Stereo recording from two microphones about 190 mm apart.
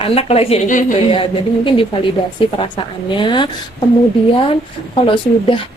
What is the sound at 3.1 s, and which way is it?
Speech, 25° left (ahead or behind).